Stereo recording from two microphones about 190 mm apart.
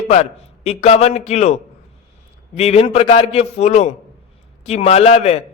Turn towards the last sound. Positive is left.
turn(degrees=35)  # may be behind; listen again after turning